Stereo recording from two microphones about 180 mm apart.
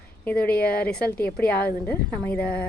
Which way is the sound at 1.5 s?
60° left (ahead or behind).